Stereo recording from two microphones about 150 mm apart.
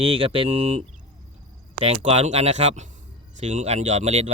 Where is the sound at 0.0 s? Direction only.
35° right (ahead or behind).